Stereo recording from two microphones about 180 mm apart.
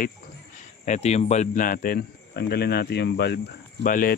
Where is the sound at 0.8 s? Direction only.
40° left (ahead or behind); by 3.3 s 65° left (ahead or behind).